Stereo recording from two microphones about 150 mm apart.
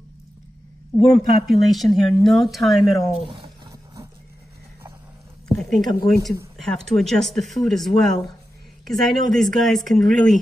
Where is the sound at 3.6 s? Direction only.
20° right (ahead or behind).